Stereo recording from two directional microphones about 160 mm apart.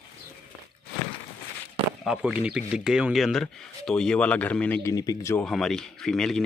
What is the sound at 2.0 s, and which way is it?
Speech, 10° right (ahead or behind).